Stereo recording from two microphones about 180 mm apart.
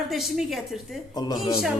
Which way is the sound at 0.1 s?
Centre (ahead or behind).